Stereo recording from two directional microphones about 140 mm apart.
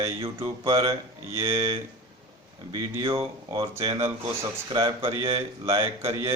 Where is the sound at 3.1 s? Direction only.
35° right (ahead or behind).